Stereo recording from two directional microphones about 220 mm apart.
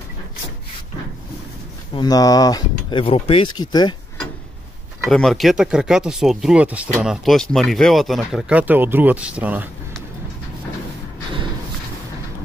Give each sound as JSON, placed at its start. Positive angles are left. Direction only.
{"t": 2.0, "sound": "speech", "side_deg": 15}
{"t": 5.1, "sound": "speech", "side_deg": 0}